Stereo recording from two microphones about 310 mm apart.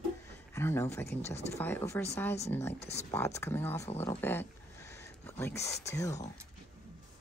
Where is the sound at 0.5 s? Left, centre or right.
Centre.